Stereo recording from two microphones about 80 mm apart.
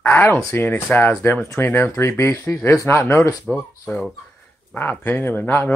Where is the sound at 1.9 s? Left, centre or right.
Left.